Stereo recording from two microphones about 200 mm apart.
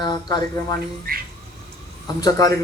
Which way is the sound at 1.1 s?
45° right (ahead or behind).